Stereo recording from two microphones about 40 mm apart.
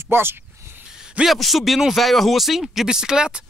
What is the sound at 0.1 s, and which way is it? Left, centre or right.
Speech, right.